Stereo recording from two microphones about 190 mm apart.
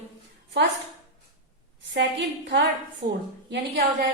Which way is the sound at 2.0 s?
65° right (ahead or behind).